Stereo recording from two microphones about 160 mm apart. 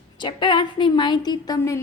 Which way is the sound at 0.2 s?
30° left (ahead or behind).